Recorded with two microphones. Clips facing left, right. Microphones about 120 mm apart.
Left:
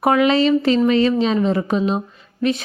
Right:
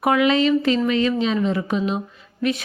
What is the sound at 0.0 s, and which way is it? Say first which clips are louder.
A woman's voice: left 2 dB; 35° left (ahead or behind).